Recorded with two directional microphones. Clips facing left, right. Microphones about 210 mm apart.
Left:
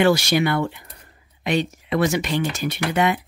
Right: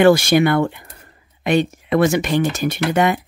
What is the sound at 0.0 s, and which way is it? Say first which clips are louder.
Speech: right 5 dB; 50° right (ahead or behind).